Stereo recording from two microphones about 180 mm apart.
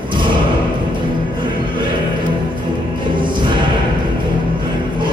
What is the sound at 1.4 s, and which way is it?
Music, 25° right (ahead or behind).